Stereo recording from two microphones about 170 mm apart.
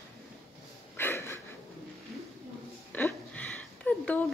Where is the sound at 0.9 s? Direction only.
15° left (ahead or behind).